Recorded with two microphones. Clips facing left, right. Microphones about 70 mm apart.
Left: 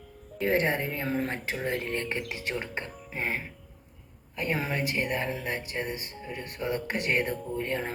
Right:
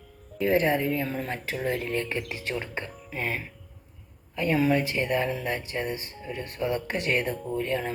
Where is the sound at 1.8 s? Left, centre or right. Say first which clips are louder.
Right 2 dB; left.